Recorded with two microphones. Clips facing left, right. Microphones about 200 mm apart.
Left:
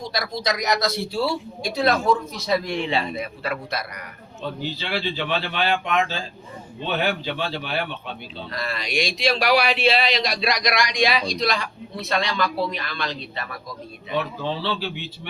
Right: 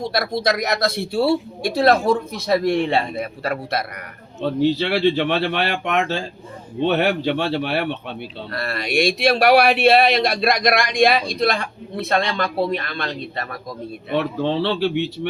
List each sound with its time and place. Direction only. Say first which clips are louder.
0.0 s speech: right 6 dB; 55° right (ahead or behind)
4.7 s speech: right 10 dB; 70° right (ahead or behind); by 13.6 s 45° right (ahead or behind)
14.1 s speech: right 5 dB; 65° right (ahead or behind)